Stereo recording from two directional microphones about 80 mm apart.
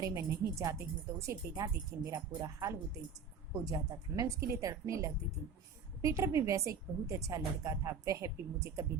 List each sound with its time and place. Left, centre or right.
0.0 s a woman's voice: right